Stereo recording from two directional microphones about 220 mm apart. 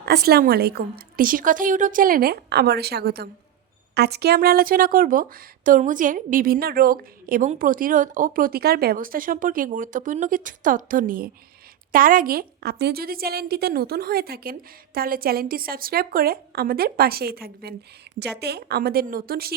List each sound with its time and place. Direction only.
0.0 s a woman's voice: 45° right (ahead or behind)